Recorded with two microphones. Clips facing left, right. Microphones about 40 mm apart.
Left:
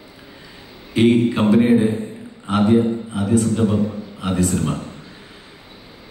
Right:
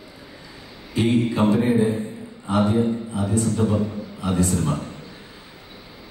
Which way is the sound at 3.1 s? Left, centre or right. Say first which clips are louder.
Left 4 dB; left.